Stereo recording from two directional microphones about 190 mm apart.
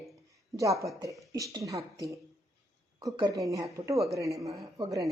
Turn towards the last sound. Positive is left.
turn(degrees=-20)  # may be behind; listen again after turning